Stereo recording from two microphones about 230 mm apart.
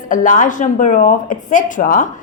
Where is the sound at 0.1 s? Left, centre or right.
Left.